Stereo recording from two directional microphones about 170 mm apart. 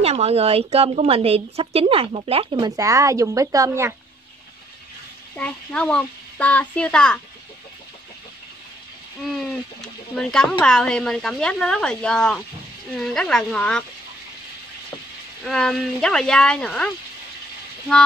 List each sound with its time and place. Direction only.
0.0 s a woman's voice: 40° right (ahead or behind)
2.6 s speech: 20° right (ahead or behind)
5.3 s a child's voice: 5° left (ahead or behind)
9.2 s speech: centre (ahead or behind)
15.4 s speech: 5° left (ahead or behind)